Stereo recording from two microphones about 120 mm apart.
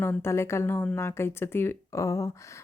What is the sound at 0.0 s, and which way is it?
A woman's voice, 20° left (ahead or behind).